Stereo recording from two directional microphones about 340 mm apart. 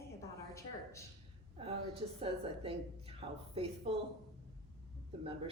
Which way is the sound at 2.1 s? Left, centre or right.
Centre.